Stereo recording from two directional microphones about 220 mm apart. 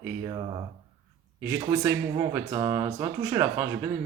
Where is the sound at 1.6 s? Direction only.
15° right (ahead or behind).